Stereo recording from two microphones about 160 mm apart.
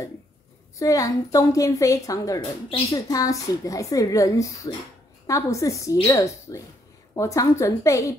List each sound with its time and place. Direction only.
0.7 s a woman's voice: 20° left (ahead or behind)